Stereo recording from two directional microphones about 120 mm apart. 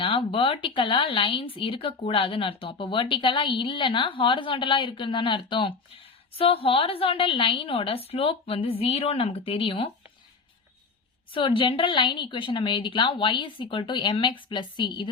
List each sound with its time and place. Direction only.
0.0 s speech: 50° left (ahead or behind)
11.3 s speech: 50° left (ahead or behind)